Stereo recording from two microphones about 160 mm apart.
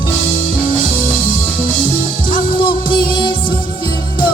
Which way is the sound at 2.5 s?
30° left (ahead or behind).